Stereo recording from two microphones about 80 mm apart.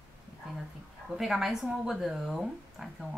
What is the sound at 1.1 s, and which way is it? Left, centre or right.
Speech, centre.